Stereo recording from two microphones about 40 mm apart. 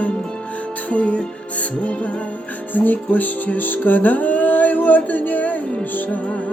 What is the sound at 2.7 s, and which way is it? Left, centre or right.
Music, left.